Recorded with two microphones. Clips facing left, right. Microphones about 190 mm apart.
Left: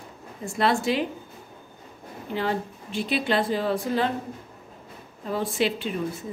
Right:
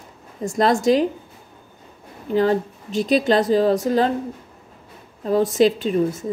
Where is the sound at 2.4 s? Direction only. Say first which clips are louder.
Right 9 dB; 40° right (ahead or behind).